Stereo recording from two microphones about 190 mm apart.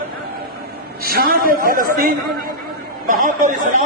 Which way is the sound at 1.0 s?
50° right (ahead or behind).